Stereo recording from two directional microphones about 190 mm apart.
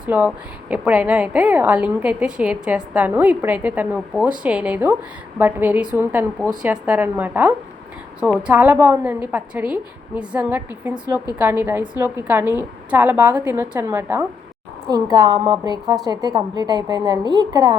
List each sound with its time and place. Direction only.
0.0 s a woman's voice: 5° right (ahead or behind)